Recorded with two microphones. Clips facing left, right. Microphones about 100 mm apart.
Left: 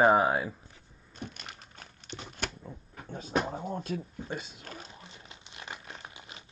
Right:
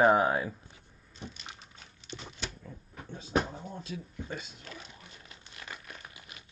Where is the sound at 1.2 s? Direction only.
55° left (ahead or behind).